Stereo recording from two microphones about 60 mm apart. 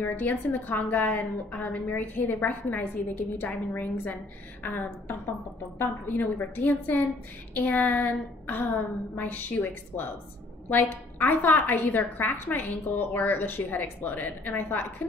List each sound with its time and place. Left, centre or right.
0.0 s a woman's voice: left